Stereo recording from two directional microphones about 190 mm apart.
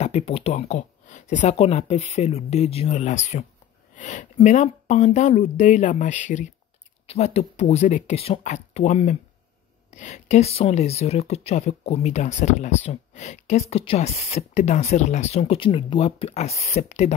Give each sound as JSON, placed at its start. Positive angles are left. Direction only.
{"t": 0.0, "sound": "speech", "side_deg": 35}